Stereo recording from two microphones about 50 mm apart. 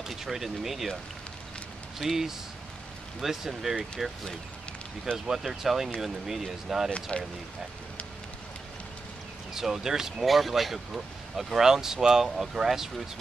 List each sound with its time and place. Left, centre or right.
0.1 s speech: centre
2.0 s speech: centre
5.3 s speech: centre
6.9 s speech: left
9.5 s speech: centre